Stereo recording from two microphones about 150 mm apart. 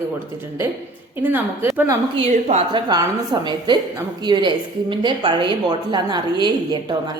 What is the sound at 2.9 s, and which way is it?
A woman's voice, 30° right (ahead or behind).